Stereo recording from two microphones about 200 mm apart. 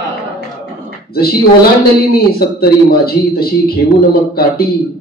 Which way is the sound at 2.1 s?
50° left (ahead or behind).